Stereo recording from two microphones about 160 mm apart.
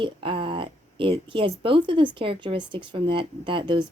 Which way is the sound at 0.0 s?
35° right (ahead or behind).